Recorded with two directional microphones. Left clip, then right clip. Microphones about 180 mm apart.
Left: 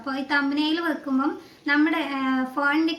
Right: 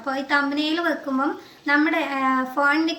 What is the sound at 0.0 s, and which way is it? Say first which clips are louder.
A woman's voice: right 3 dB; 10° left (ahead or behind).